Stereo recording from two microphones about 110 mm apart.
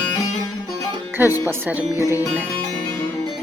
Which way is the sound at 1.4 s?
20° right (ahead or behind).